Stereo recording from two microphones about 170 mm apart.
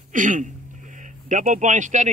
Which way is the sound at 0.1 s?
50° right (ahead or behind).